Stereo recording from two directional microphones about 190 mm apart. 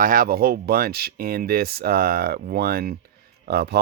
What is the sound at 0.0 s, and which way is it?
Speech, 50° right (ahead or behind).